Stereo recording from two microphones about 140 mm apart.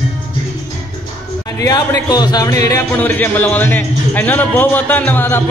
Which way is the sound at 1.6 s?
25° left (ahead or behind).